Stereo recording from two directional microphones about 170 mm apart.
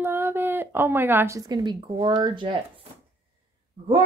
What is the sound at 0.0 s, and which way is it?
A woman's voice, 15° right (ahead or behind).